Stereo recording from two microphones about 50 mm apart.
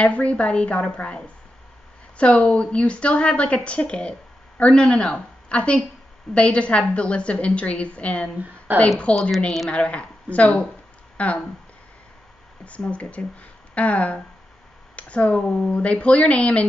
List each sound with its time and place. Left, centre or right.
0.0 s a woman's voice: left
8.7 s speech: right
9.1 s a woman's voice: left
12.6 s a woman's voice: left